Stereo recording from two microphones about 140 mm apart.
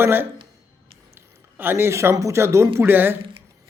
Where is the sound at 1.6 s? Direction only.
15° right (ahead or behind).